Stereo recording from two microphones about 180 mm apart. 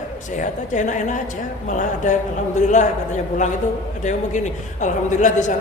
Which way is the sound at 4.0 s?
40° left (ahead or behind).